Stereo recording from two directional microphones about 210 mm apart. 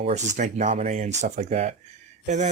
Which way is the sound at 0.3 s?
35° right (ahead or behind).